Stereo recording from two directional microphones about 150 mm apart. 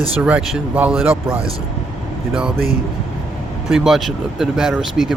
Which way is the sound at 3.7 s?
Centre (ahead or behind).